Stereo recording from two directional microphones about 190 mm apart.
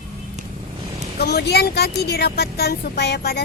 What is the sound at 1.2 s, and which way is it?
Speech, 55° left (ahead or behind).